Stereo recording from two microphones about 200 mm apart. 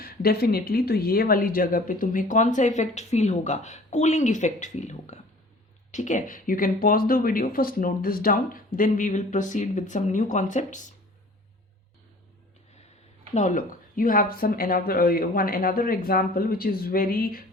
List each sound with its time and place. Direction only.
0.0 s speech: 50° left (ahead or behind)
13.3 s speech: 40° left (ahead or behind)